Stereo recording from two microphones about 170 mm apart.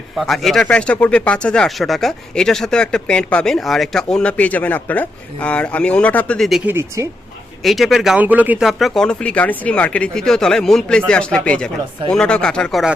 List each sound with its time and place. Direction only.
0.2 s speech: centre (ahead or behind)
6.7 s speech: 15° right (ahead or behind)
7.6 s speech: centre (ahead or behind)